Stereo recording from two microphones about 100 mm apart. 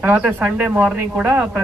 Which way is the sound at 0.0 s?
20° right (ahead or behind).